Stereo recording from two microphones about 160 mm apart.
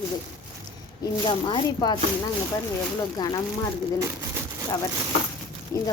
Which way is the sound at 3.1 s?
25° left (ahead or behind).